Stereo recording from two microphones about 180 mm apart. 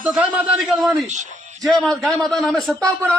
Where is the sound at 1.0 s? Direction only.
40° right (ahead or behind).